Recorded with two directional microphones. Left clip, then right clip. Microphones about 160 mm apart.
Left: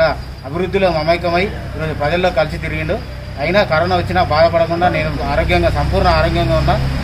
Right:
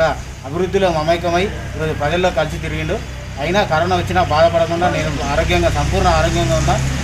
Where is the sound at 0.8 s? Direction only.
20° left (ahead or behind).